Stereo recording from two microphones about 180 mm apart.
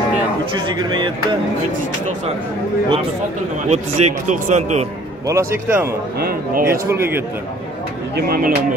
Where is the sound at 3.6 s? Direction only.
40° right (ahead or behind).